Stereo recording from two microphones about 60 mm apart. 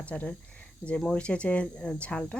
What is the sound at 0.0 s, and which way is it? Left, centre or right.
Speech, left.